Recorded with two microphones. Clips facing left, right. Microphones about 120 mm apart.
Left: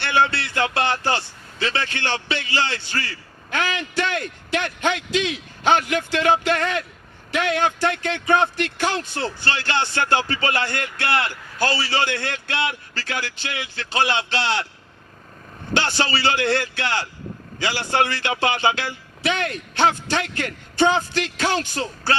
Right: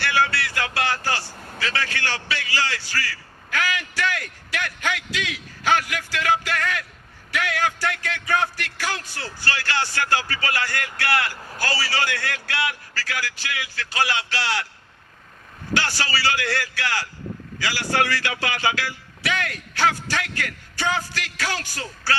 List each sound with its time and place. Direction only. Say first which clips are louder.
0.0 s a man's voice: left 2 dB; 25° left (ahead or behind)
15.7 s a man's voice: left 3 dB; 25° left (ahead or behind)